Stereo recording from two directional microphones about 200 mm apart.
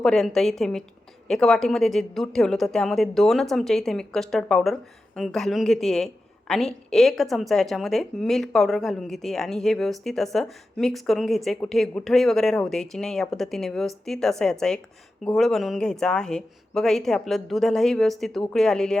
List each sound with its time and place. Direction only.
0.0 s a woman's voice: centre (ahead or behind)